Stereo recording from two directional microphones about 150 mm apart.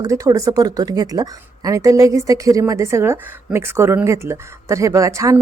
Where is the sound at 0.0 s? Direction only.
25° right (ahead or behind).